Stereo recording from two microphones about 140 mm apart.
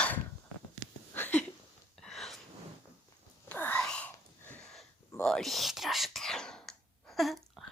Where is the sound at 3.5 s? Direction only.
10° left (ahead or behind).